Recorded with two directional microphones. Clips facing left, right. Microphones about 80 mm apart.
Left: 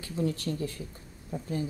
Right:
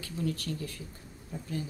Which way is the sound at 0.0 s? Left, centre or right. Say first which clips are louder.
Left 3 dB; left.